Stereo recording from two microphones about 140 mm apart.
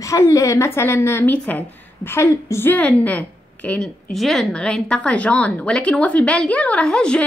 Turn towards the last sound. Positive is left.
turn(degrees=5)  # may be behind; listen again after turning